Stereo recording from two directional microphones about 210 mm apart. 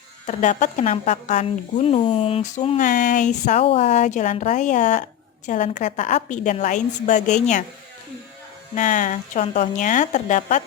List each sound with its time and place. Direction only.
0.3 s speech: 35° left (ahead or behind)
8.7 s speech: 35° left (ahead or behind)